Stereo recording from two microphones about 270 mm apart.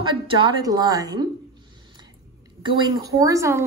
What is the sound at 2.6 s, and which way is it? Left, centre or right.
A woman's voice, centre.